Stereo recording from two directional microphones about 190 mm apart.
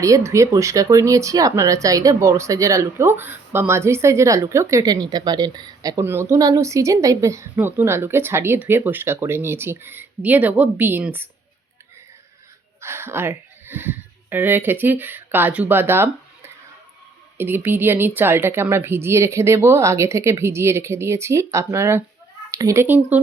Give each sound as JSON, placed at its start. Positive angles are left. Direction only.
{"t": 0.0, "sound": "speech", "side_deg": -15}
{"t": 12.8, "sound": "speech", "side_deg": -10}